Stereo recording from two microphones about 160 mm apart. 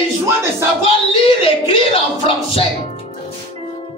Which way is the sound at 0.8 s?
35° left (ahead or behind).